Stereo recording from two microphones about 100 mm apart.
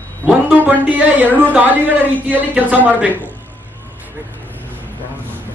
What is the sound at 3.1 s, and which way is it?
Speech, 15° left (ahead or behind).